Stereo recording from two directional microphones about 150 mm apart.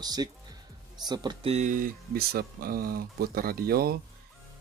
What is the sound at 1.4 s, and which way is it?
Speech, 50° right (ahead or behind).